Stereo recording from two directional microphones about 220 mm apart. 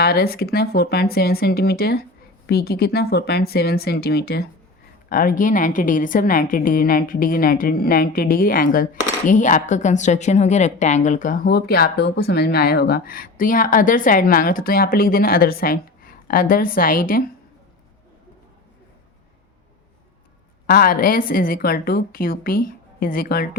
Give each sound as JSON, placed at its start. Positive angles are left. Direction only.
{"t": 0.0, "sound": "a woman's voice", "side_deg": 45}
{"t": 20.7, "sound": "a woman's voice", "side_deg": 40}